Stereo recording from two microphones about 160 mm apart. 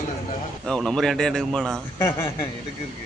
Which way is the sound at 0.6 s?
Centre (ahead or behind).